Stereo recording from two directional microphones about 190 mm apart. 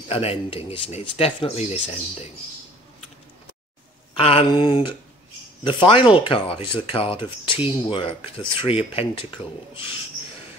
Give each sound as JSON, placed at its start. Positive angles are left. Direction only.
{"t": 0.1, "sound": "speech", "side_deg": 30}
{"t": 4.2, "sound": "speech", "side_deg": 30}